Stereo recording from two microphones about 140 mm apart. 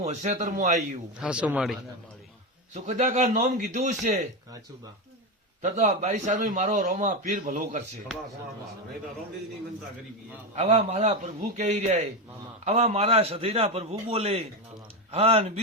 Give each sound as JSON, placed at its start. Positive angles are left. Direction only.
{"t": 0.0, "sound": "a man's voice", "side_deg": -55}
{"t": 1.2, "sound": "speech", "side_deg": -10}
{"t": 2.7, "sound": "a man's voice", "side_deg": -55}
{"t": 5.6, "sound": "a man's voice", "side_deg": -55}
{"t": 10.5, "sound": "a man's voice", "side_deg": -50}